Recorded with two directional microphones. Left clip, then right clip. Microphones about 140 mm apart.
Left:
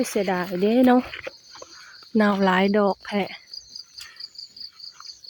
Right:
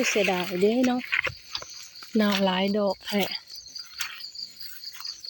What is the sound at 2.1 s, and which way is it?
Speech, 25° left (ahead or behind).